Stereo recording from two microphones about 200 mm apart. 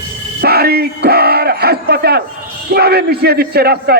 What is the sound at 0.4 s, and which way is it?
A man's voice, 50° right (ahead or behind).